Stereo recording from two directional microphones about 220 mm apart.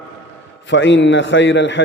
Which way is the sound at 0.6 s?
55° left (ahead or behind).